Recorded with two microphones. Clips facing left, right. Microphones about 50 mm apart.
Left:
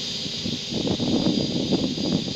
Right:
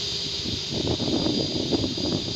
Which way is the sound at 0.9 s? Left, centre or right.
Left.